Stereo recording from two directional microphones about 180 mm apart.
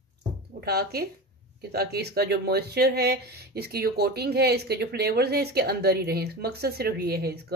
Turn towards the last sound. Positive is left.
turn(degrees=-60)  # may be behind; listen again after turning